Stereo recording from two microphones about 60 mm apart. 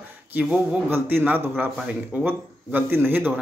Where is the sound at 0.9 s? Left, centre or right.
Right.